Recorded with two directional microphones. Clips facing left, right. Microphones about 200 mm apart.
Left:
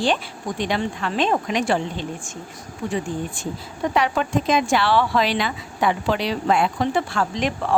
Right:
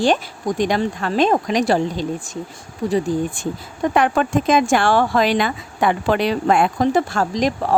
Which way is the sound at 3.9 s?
50° right (ahead or behind).